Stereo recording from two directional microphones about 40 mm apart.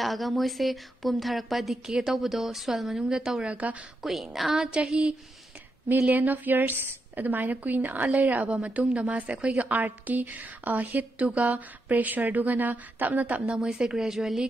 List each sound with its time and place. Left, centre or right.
0.0 s a woman's voice: centre
3.4 s speech: right
4.0 s a woman's voice: centre
4.6 s a sound: right
6.0 s a woman's voice: right
13.6 s a woman's voice: centre